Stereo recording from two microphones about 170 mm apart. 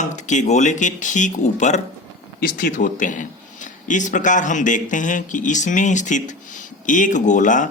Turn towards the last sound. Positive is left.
turn(degrees=50)  # may be behind; listen again after turning